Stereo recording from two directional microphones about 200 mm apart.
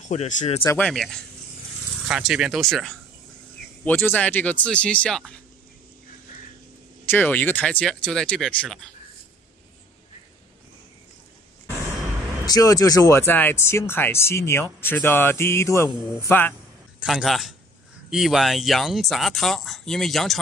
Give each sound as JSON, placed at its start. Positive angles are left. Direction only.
{"t": 0.1, "sound": "speech", "side_deg": 35}
{"t": 0.7, "sound": "speech", "side_deg": 5}
{"t": 7.1, "sound": "speech", "side_deg": 10}
{"t": 12.4, "sound": "speech", "side_deg": 20}
{"t": 17.0, "sound": "speech", "side_deg": 0}